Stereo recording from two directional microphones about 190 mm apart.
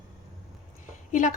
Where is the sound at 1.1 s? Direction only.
45° left (ahead or behind).